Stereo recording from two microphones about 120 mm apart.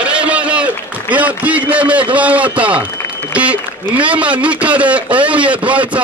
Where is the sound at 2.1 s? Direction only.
10° right (ahead or behind).